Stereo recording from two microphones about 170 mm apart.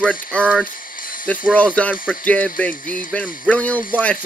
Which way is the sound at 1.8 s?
5° left (ahead or behind).